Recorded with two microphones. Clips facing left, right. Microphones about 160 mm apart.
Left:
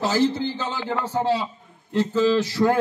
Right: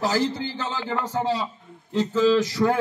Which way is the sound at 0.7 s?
10° left (ahead or behind).